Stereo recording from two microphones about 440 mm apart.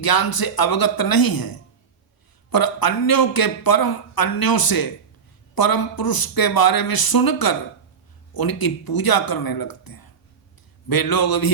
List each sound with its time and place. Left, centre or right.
0.0 s speech: left